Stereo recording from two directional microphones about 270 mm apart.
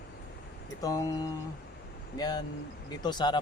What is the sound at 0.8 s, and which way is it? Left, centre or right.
Speech, centre.